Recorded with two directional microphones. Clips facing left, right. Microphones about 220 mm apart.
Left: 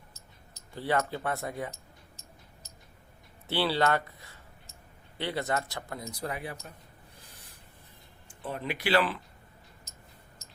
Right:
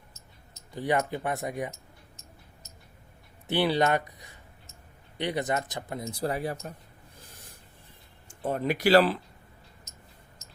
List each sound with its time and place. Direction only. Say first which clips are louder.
0.7 s speech: right 2 dB; 15° right (ahead or behind)
3.4 s speech: right 3 dB; 15° right (ahead or behind); by 6.7 s 40° right (ahead or behind)
8.3 s speech: right 7 dB; 45° right (ahead or behind)